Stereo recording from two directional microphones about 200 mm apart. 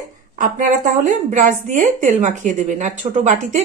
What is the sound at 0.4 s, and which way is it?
A woman's voice, 40° right (ahead or behind).